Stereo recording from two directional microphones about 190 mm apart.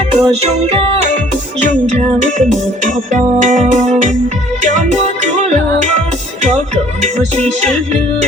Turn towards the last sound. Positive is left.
turn(degrees=-35)  # may be behind; listen again after turning